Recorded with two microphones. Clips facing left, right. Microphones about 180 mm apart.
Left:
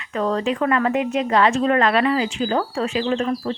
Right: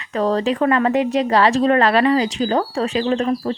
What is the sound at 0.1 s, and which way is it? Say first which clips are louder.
A woman's voice: right 3 dB; 35° right (ahead or behind).